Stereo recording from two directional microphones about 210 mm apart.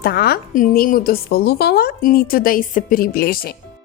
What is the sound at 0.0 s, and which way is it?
A woman's voice, 50° left (ahead or behind).